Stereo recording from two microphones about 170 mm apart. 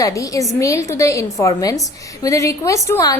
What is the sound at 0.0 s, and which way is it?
A woman's voice, 20° left (ahead or behind).